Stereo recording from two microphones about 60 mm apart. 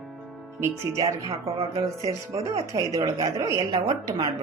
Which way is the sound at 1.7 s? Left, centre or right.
Right.